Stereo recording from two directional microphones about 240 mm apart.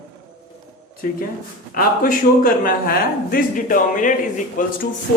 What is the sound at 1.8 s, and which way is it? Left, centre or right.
A man's voice, left.